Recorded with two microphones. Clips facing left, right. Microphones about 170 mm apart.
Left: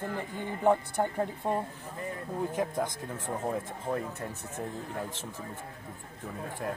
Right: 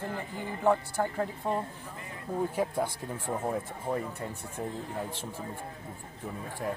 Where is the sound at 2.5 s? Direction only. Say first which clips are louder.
Right 1 dB; 10° right (ahead or behind).